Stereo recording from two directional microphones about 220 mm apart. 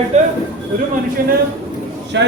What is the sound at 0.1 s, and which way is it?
Speech, 30° right (ahead or behind).